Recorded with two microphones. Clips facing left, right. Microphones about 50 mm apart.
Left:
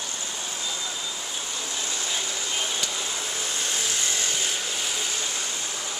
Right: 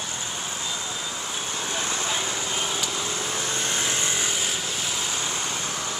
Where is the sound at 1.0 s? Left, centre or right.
Right.